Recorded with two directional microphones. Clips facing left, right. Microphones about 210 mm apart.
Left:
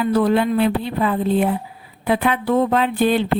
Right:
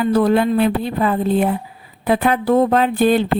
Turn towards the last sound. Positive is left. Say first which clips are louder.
# right 3 dB
turn(degrees=-45)  # may be behind; listen again after turning